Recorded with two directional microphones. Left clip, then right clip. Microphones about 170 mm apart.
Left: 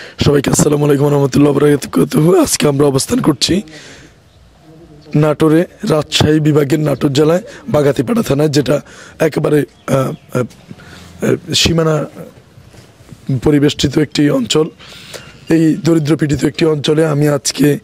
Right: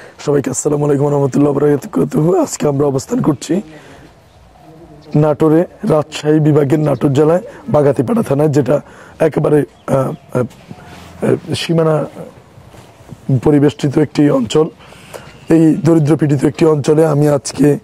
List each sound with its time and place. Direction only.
0.0 s speech: 30° left (ahead or behind)
5.2 s a man's voice: 25° left (ahead or behind)
13.4 s a man's voice: 25° left (ahead or behind)